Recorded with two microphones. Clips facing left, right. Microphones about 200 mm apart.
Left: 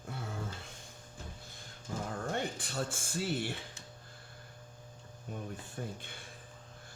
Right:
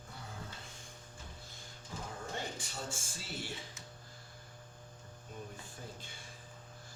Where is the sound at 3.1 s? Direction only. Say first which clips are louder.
Left 9 dB; 60° left (ahead or behind).